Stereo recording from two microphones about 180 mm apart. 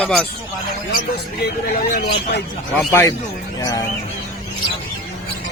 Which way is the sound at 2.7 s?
15° left (ahead or behind).